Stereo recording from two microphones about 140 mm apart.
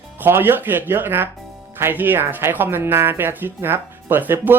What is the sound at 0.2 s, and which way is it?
Speech, 15° right (ahead or behind).